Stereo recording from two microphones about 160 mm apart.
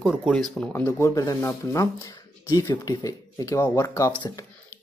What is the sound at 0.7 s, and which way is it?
Speech, 15° left (ahead or behind).